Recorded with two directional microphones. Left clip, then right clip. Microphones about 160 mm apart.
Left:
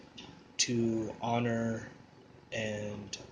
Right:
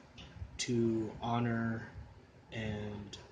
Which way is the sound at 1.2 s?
20° right (ahead or behind).